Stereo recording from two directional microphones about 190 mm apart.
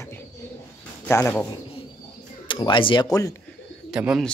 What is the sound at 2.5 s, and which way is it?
Speech, 25° left (ahead or behind).